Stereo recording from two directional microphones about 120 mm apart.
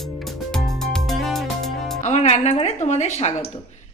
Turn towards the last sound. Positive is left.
turn(degrees=70)  # may be behind; listen again after turning